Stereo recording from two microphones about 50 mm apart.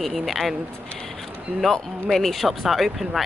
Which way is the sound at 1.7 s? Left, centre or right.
Centre.